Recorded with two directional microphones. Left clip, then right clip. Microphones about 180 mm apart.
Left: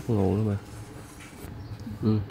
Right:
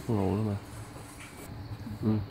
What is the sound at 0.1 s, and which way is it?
Speech, 5° left (ahead or behind).